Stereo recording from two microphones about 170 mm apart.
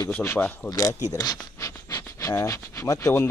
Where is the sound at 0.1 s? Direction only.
10° left (ahead or behind).